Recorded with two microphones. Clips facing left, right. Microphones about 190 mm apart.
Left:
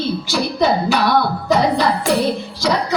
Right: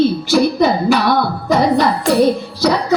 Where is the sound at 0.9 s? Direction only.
55° right (ahead or behind).